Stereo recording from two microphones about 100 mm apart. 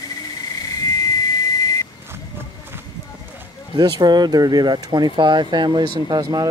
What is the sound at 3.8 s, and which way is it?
Speech, 45° right (ahead or behind).